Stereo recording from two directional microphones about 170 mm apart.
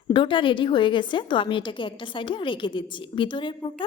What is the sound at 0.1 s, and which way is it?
A woman's voice, 30° left (ahead or behind).